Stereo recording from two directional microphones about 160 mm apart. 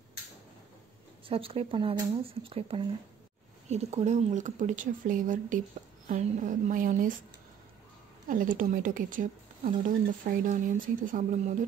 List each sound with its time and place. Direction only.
1.2 s speech: 35° right (ahead or behind)
3.6 s a woman's voice: 45° right (ahead or behind)
8.3 s a woman's voice: 55° right (ahead or behind)